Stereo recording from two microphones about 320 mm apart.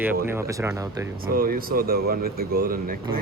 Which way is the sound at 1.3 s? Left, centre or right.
Right.